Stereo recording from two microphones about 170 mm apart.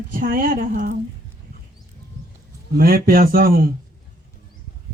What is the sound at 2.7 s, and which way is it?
Speech, 60° right (ahead or behind).